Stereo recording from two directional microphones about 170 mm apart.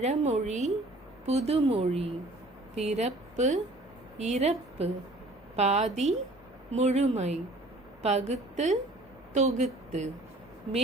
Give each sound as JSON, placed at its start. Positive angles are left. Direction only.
{"t": 0.0, "sound": "a woman's voice", "side_deg": -40}